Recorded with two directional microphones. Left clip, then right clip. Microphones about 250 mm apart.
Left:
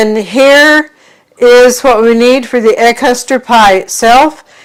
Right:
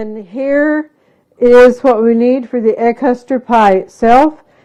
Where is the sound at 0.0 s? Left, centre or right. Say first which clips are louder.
Left 13 dB; centre.